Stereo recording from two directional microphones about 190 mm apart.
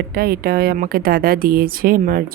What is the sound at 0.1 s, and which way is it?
Speech, 50° right (ahead or behind).